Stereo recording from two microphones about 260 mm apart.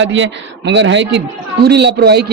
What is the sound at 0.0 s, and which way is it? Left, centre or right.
A man's voice, right.